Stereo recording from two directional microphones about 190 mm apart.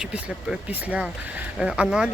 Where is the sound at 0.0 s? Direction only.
5° right (ahead or behind).